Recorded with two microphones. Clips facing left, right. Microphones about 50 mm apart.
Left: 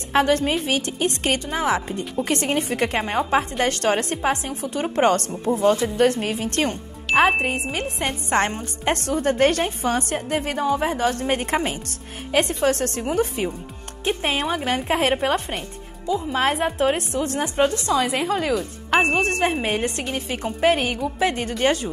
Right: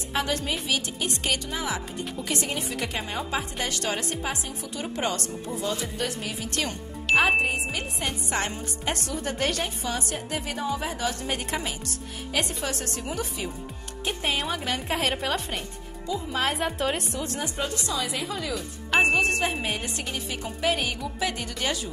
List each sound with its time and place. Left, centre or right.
0.1 s a woman's voice: left